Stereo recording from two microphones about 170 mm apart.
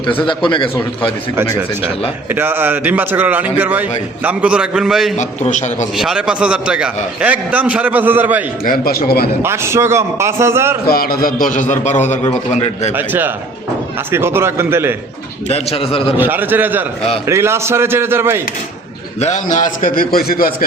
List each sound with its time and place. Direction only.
0.0 s a man's voice: 30° left (ahead or behind)
2.3 s a man's voice: 15° right (ahead or behind)
5.1 s a man's voice: 45° left (ahead or behind)
6.0 s a man's voice: 5° right (ahead or behind)
8.6 s a man's voice: 60° left (ahead or behind)
9.4 s a man's voice: 15° right (ahead or behind)
10.8 s a man's voice: 60° left (ahead or behind); by 12.9 s 40° left (ahead or behind)
13.0 s a man's voice: 10° right (ahead or behind)
15.4 s a man's voice: 35° left (ahead or behind)
16.1 s a man's voice: 10° right (ahead or behind)
19.2 s a man's voice: 45° left (ahead or behind)